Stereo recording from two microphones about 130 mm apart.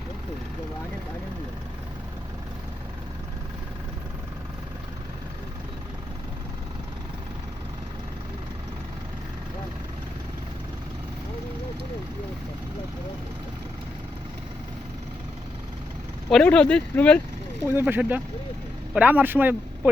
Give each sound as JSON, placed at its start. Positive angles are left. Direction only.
{"t": 16.3, "sound": "speech", "side_deg": 10}
{"t": 17.7, "sound": "speech", "side_deg": -15}